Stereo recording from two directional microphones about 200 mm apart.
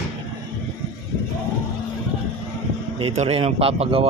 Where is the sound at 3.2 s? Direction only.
30° right (ahead or behind).